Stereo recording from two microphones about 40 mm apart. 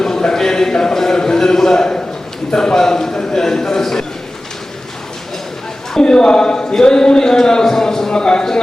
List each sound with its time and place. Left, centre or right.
0.0 s a sound: centre
2.5 s a man's voice: centre
6.0 s a man's voice: centre